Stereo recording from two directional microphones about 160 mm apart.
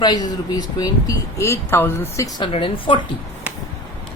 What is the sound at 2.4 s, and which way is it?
Speech, 35° left (ahead or behind).